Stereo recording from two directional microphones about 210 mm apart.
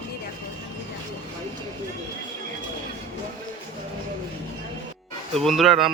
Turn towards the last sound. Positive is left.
turn(degrees=0)  # may be behind; listen again after turning